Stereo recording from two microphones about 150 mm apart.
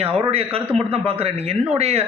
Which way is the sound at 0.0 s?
40° right (ahead or behind).